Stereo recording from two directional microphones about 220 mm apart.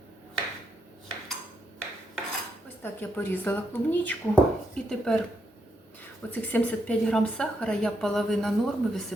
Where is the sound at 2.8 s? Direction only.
10° left (ahead or behind).